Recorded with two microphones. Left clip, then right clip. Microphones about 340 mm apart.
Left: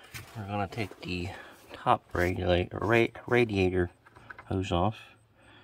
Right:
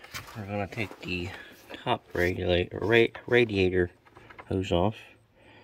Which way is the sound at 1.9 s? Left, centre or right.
Left.